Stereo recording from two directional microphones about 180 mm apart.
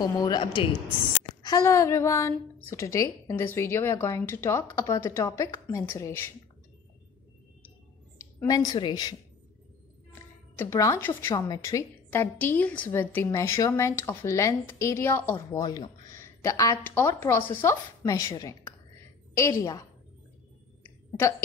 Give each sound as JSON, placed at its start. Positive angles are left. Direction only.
{"t": 0.0, "sound": "a woman's voice", "side_deg": 25}
{"t": 8.2, "sound": "a woman's voice", "side_deg": 15}
{"t": 10.6, "sound": "a woman's voice", "side_deg": 15}